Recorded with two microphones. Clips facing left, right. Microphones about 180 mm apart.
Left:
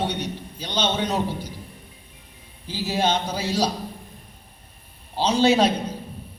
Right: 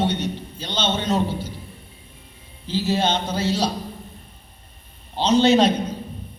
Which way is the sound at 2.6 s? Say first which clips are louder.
Right 2 dB; 10° left (ahead or behind).